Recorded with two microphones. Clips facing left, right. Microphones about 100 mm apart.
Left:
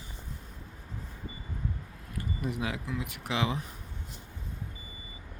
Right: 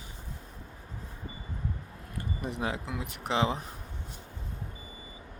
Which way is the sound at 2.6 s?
30° right (ahead or behind).